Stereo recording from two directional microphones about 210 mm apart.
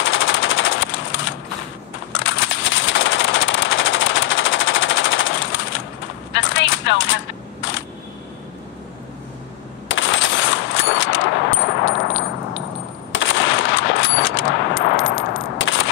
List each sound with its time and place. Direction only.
0.0 s machine gun: 65° left (ahead or behind)
2.2 s a sound: 65° left (ahead or behind)
6.3 s chopping: 65° left (ahead or behind)
9.8 s ding: 65° left (ahead or behind)
13.1 s machine gun: 65° left (ahead or behind)
15.5 s gunshot: 65° left (ahead or behind)